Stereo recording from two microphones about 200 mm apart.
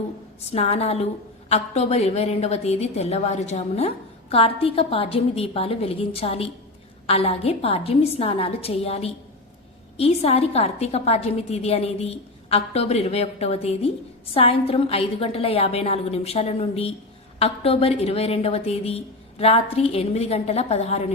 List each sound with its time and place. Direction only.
0.5 s a woman's voice: 30° left (ahead or behind)